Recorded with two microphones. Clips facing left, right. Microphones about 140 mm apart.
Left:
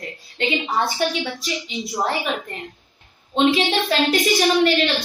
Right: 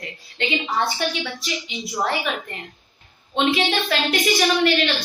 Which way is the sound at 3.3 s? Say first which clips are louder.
Left 3 dB; 35° left (ahead or behind).